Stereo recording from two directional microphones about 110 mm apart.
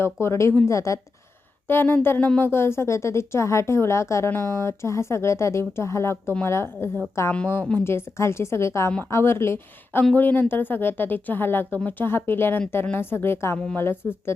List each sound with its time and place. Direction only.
0.0 s speech: 25° left (ahead or behind)
7.9 s speech: 25° left (ahead or behind)